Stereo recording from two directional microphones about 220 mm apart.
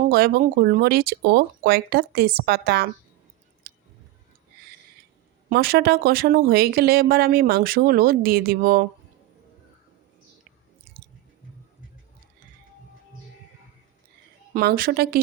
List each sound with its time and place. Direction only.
0.0 s speech: 45° right (ahead or behind)
3.6 s a sound: 40° right (ahead or behind)
5.5 s speech: 45° right (ahead or behind)
14.5 s speech: 45° right (ahead or behind)